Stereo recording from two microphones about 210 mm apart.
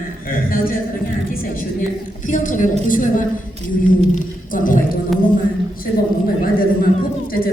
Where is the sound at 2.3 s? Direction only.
40° left (ahead or behind).